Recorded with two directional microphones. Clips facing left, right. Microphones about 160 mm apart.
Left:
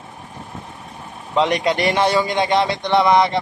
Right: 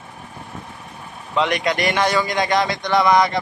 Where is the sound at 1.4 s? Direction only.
30° left (ahead or behind).